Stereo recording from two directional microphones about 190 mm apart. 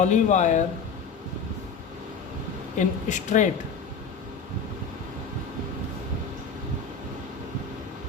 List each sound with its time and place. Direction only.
0.0 s a woman's voice: 40° left (ahead or behind)
2.7 s a woman's voice: 40° left (ahead or behind)